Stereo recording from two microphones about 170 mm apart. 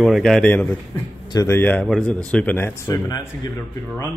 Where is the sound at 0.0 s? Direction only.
Centre (ahead or behind); by 3.3 s 15° left (ahead or behind).